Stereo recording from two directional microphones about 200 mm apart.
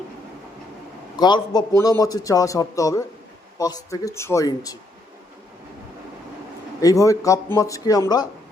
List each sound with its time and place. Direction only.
1.2 s a man's voice: 20° left (ahead or behind)
6.8 s a man's voice: 15° left (ahead or behind)